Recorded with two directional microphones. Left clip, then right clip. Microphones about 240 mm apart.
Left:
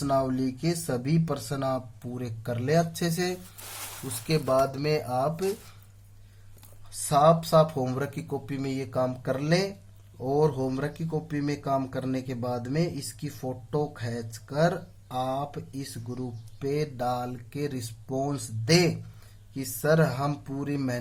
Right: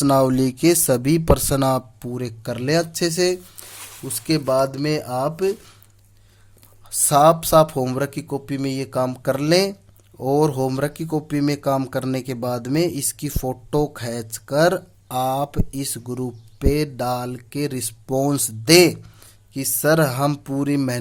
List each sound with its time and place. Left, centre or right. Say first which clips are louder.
0.0 s speech: right 9 dB; right
7.1 s speech: right 7 dB; right